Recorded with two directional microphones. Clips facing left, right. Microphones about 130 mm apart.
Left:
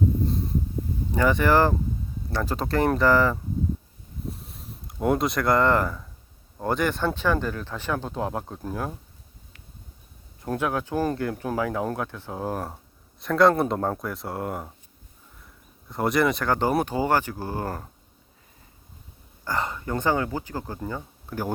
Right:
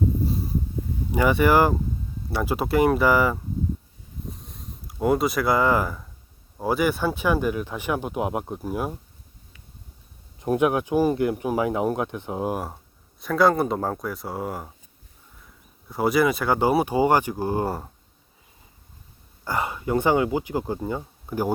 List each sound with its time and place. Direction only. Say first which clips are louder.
0.3 s a sound: even; 5° right (ahead or behind)
1.1 s speech: right 2 dB; 10° right (ahead or behind)
4.3 s a sound: left 4 dB; centre (ahead or behind)
6.6 s speech: right 2 dB; 5° right (ahead or behind)
10.4 s speech: right 6 dB; 20° right (ahead or behind)
12.6 s speech: right 1 dB; centre (ahead or behind)
19.5 s speech: right 3 dB; 10° right (ahead or behind)